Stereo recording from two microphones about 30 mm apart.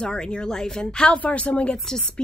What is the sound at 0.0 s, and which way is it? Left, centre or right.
Speech, left.